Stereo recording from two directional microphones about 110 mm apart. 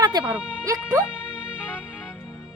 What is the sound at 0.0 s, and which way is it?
Music, 40° right (ahead or behind).